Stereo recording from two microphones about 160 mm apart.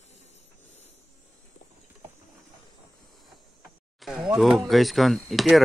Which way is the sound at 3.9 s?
Centre (ahead or behind).